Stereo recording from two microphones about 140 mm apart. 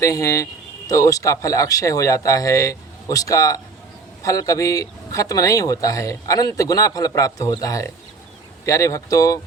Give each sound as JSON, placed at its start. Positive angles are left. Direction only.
{"t": 0.0, "sound": "speech", "side_deg": 25}